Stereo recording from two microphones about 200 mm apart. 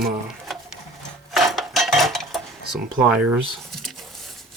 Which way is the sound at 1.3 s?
Centre (ahead or behind).